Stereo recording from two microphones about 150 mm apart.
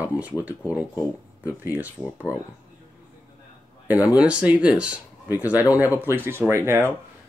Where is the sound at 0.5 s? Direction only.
10° right (ahead or behind).